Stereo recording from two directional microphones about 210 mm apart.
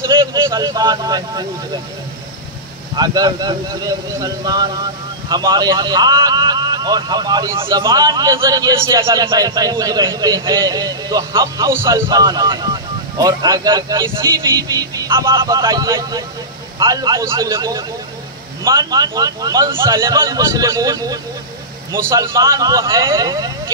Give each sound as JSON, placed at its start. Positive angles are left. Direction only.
{"t": 0.2, "sound": "speech", "side_deg": -20}
{"t": 3.0, "sound": "a man's voice", "side_deg": -20}